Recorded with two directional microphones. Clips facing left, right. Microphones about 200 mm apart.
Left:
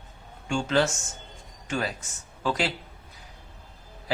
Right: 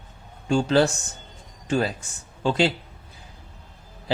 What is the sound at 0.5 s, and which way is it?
Speech, 35° right (ahead or behind).